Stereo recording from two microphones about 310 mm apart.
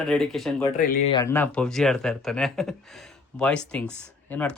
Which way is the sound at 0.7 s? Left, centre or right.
Left.